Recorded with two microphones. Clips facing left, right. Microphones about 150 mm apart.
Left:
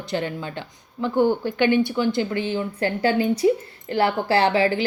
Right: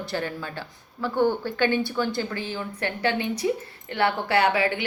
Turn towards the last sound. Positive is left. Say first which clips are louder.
# left 3 dB
turn(degrees=30)  # may be behind; listen again after turning